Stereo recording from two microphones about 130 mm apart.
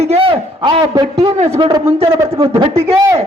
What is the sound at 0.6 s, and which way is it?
Speech, 35° right (ahead or behind).